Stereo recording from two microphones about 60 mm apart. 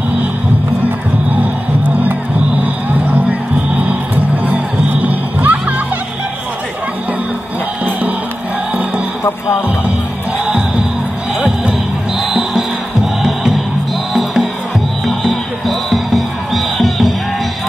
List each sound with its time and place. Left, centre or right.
2.6 s music: right
12.2 s music: centre
15.2 s music: centre